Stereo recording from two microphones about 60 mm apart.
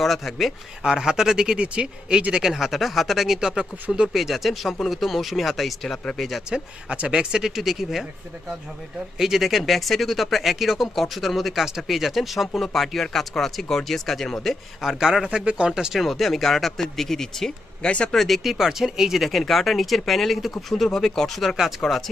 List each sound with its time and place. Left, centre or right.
0.0 s speech: centre
0.8 s speech: centre
1.5 s speech: centre
6.5 s speech: centre
9.1 s speech: centre
16.0 s speech: centre
18.2 s speech: centre